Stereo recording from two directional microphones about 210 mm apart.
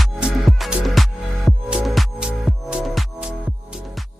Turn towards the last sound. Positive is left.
turn(degrees=-5)  # may be behind; listen again after turning